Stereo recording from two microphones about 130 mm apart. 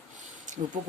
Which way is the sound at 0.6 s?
70° right (ahead or behind).